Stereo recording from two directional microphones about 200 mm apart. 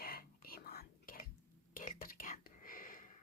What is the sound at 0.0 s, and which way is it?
Whispering, 50° left (ahead or behind).